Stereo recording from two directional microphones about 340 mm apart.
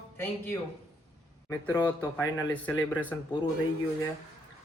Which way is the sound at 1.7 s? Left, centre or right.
Centre.